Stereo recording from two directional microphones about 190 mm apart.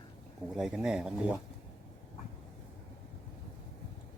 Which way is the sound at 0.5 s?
5° right (ahead or behind).